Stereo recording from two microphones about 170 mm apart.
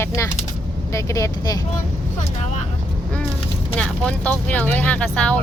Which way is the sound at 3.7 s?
5° left (ahead or behind).